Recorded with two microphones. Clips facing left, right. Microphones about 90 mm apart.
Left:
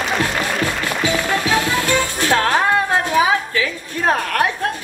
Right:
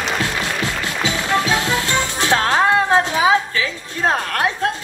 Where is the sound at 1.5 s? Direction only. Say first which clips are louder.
Left 2 dB; 20° right (ahead or behind).